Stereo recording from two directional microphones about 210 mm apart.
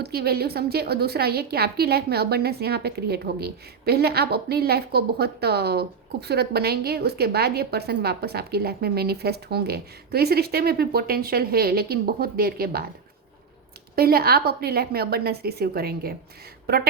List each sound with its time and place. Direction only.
0.0 s a woman's voice: 50° right (ahead or behind)
13.9 s a woman's voice: 45° right (ahead or behind)